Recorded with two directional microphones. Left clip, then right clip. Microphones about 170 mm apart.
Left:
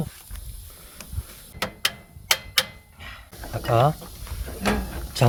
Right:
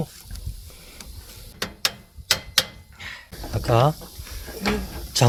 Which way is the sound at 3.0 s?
55° right (ahead or behind).